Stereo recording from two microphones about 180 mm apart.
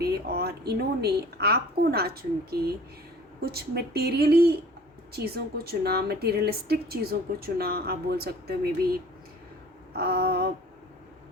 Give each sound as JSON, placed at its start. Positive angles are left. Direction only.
{"t": 0.0, "sound": "a woman's voice", "side_deg": -60}
{"t": 9.9, "sound": "a woman's voice", "side_deg": -60}